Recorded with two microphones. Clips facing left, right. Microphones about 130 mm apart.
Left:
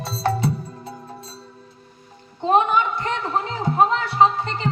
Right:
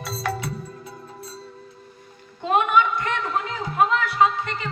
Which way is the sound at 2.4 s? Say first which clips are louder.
Left 2 dB; 30° left (ahead or behind).